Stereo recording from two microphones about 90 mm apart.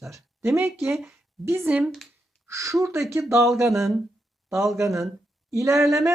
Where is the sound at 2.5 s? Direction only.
35° right (ahead or behind).